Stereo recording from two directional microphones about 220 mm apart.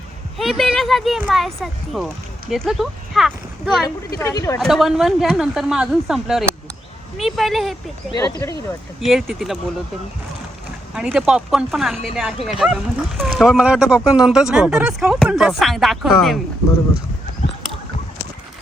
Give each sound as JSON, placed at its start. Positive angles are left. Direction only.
{"t": 0.3, "sound": "speech", "side_deg": 0}
{"t": 3.8, "sound": "speech", "side_deg": 15}
{"t": 4.6, "sound": "speech", "side_deg": 0}
{"t": 8.1, "sound": "speech", "side_deg": 15}
{"t": 9.0, "sound": "speech", "side_deg": 0}
{"t": 10.9, "sound": "speech", "side_deg": -5}